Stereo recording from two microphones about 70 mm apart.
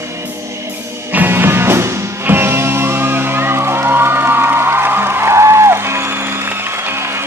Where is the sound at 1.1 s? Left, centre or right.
Right.